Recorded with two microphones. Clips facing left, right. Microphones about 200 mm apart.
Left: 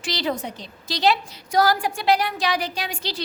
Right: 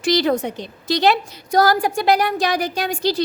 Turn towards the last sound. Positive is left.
turn(degrees=-45)  # may be behind; listen again after turning